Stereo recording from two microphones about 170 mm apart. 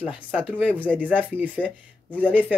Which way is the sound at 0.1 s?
5° right (ahead or behind).